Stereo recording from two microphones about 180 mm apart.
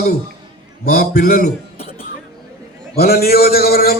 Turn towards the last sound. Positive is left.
turn(degrees=55)  # may be behind; listen again after turning